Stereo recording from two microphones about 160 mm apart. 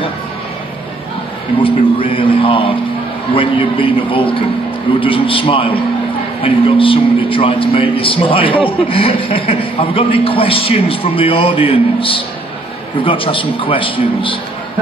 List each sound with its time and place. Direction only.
1.6 s a man's voice: 35° left (ahead or behind)